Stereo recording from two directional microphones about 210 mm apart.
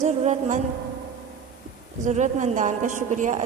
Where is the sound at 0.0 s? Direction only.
35° right (ahead or behind).